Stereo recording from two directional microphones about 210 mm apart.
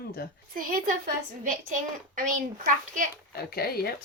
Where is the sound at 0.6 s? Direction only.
40° right (ahead or behind).